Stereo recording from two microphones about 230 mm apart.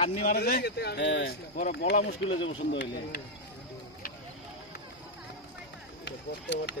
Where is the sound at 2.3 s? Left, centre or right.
Left.